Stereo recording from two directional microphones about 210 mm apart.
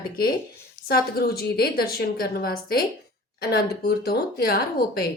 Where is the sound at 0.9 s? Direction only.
50° left (ahead or behind).